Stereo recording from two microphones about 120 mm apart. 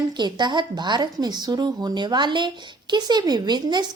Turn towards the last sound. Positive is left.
turn(degrees=-35)  # may be behind; listen again after turning